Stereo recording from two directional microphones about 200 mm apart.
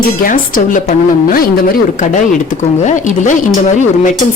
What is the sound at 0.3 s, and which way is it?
A woman's voice, 40° left (ahead or behind).